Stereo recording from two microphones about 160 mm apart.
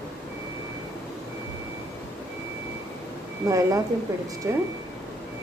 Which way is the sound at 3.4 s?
20° right (ahead or behind).